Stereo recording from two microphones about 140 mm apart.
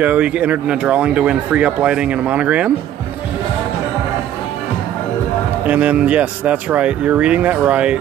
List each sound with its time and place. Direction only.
0.0 s speech: 10° right (ahead or behind)
5.7 s speech: 10° right (ahead or behind)